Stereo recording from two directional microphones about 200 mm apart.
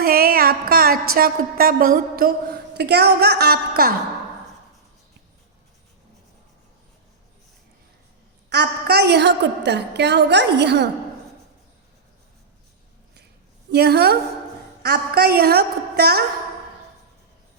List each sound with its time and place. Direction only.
0.0 s music: 50° right (ahead or behind)
1.1 s a woman's voice: 45° right (ahead or behind)
8.4 s a woman's voice: 55° right (ahead or behind)
13.7 s a woman's voice: 55° right (ahead or behind)